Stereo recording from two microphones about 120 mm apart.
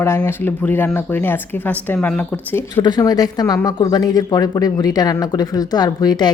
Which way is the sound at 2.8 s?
35° left (ahead or behind).